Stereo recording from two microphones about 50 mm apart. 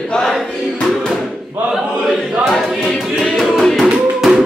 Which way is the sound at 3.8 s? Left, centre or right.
Centre.